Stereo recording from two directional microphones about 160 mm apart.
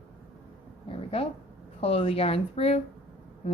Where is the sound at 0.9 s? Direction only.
35° left (ahead or behind).